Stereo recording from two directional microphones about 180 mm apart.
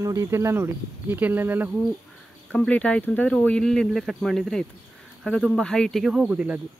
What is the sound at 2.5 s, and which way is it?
Speech, 5° left (ahead or behind).